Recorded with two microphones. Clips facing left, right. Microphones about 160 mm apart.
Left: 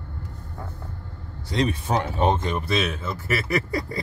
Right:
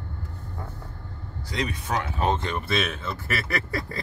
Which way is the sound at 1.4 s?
25° left (ahead or behind).